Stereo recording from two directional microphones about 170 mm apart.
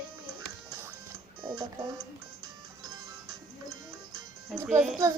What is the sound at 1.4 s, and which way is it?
Music, 25° right (ahead or behind).